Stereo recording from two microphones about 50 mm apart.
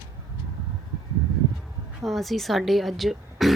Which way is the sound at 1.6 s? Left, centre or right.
Centre.